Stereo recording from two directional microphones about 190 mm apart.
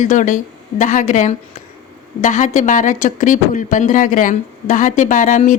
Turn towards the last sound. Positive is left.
turn(degrees=45)  # may be behind; listen again after turning